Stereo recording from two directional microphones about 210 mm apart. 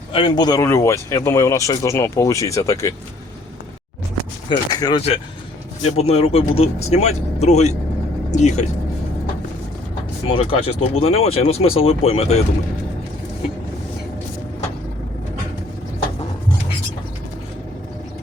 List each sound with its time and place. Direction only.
0.1 s speech: 25° left (ahead or behind)
4.4 s speech: 20° left (ahead or behind)
10.2 s speech: 25° left (ahead or behind)